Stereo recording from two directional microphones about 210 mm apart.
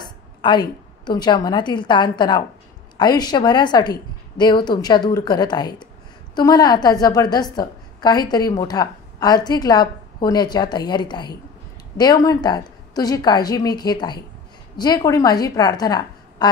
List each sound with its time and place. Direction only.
0.0 s a woman's voice: 20° left (ahead or behind)